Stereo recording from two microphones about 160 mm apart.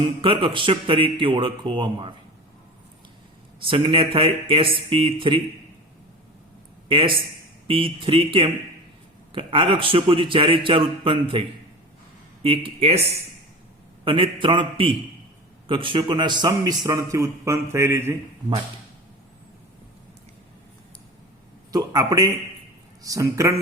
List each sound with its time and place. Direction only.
0.0 s a man's voice: 30° right (ahead or behind)
3.7 s a man's voice: 35° right (ahead or behind)
6.8 s a man's voice: 35° right (ahead or behind)
14.0 s a man's voice: 35° right (ahead or behind); by 18.2 s 15° right (ahead or behind)
21.7 s a man's voice: 25° right (ahead or behind)